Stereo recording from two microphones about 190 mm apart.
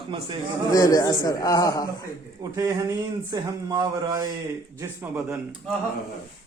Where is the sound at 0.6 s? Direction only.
20° left (ahead or behind).